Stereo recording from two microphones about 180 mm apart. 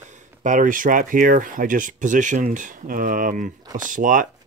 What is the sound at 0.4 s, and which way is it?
Speech, 45° right (ahead or behind).